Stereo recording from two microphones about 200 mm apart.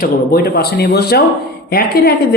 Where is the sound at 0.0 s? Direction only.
50° left (ahead or behind).